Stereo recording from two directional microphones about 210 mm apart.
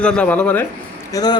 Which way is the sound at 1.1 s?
20° left (ahead or behind).